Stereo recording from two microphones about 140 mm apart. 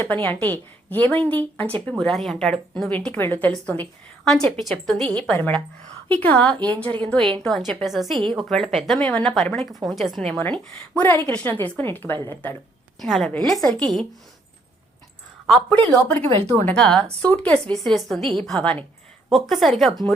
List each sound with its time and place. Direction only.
0.0 s a woman's voice: 15° left (ahead or behind)
8.2 s a woman's voice: 35° right (ahead or behind)
8.4 s a woman's voice: centre (ahead or behind)
13.0 s a woman's voice: centre (ahead or behind)
15.4 s a woman's voice: 5° left (ahead or behind)